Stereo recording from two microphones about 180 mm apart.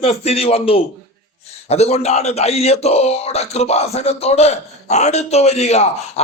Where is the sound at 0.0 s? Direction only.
35° left (ahead or behind).